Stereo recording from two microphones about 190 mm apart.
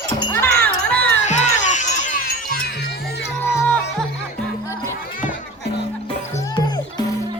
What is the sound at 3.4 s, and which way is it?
Music, 10° left (ahead or behind).